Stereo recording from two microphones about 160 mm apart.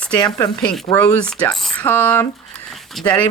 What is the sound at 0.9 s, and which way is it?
Speech, 5° left (ahead or behind).